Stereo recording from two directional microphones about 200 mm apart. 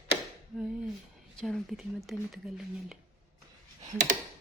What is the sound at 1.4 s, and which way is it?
Speech, centre (ahead or behind).